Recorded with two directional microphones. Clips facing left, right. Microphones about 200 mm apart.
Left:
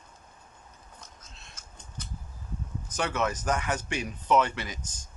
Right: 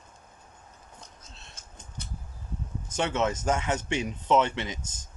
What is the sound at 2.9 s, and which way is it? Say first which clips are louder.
Speech: right 2 dB; 25° right (ahead or behind).